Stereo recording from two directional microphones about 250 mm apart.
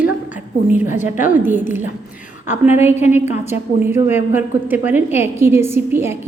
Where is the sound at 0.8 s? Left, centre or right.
Left.